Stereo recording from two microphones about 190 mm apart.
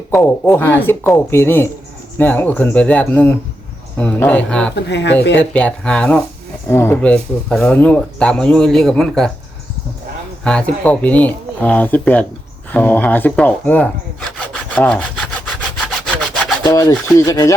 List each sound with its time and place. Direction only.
0.1 s speech: 5° left (ahead or behind)
4.7 s speech: 65° left (ahead or behind)
5.4 s speech: 5° left (ahead or behind)
10.4 s speech: 5° left (ahead or behind)
15.9 s wood: 5° left (ahead or behind)
16.6 s speech: 20° left (ahead or behind)